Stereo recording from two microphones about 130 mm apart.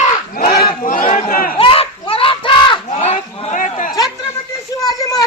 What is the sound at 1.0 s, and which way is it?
Speech, 60° left (ahead or behind).